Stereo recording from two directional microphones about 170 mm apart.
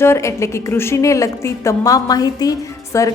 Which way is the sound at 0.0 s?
15° left (ahead or behind).